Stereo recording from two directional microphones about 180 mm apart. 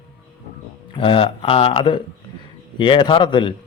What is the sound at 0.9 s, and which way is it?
A man's voice, 30° left (ahead or behind).